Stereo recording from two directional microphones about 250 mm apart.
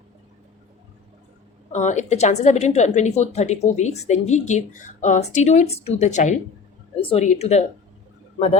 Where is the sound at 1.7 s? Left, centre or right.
Left.